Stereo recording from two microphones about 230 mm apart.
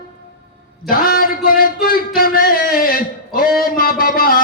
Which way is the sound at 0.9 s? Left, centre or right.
Left.